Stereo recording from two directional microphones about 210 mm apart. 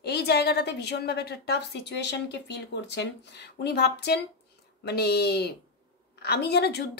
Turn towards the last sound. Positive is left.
turn(degrees=50)  # may be behind; listen again after turning